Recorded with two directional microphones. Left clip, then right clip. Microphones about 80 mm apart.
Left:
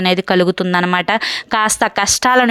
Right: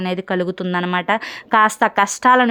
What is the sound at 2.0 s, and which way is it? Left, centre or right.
Speech, left.